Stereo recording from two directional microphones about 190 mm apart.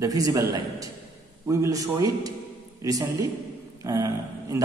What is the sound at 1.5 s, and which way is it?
A man's voice, 15° right (ahead or behind).